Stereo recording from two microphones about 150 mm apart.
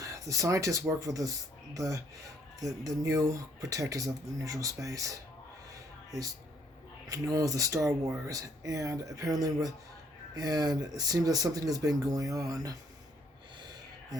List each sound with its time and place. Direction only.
0.0 s speech: 20° right (ahead or behind)
7.1 s speech: 25° right (ahead or behind)
13.6 s gasp: 30° right (ahead or behind)